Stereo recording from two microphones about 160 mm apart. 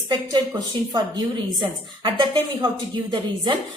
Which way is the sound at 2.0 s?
30° right (ahead or behind).